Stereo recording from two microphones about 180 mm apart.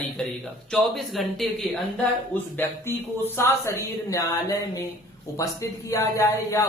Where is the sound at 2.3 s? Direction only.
10° left (ahead or behind).